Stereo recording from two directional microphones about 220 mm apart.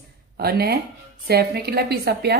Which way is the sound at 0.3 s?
45° right (ahead or behind).